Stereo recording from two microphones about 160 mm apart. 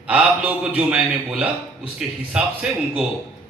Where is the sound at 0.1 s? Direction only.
5° right (ahead or behind).